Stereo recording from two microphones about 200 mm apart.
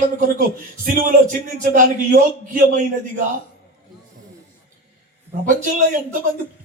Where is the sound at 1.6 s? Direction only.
40° right (ahead or behind).